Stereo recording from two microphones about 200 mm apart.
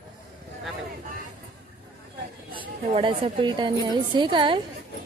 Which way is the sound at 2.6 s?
25° right (ahead or behind).